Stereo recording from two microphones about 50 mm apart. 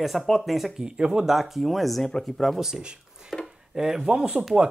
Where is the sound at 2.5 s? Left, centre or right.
Centre.